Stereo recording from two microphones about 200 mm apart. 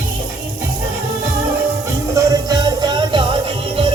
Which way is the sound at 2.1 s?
20° right (ahead or behind).